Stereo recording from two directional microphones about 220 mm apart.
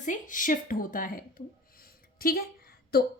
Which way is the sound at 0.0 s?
35° left (ahead or behind).